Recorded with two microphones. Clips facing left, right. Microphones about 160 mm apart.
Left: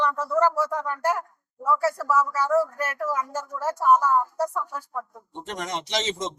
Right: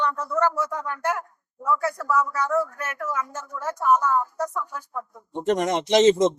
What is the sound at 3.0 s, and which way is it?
Speech, 35° left (ahead or behind).